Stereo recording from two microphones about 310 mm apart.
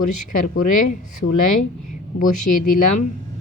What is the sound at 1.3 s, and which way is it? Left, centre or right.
Speech, left.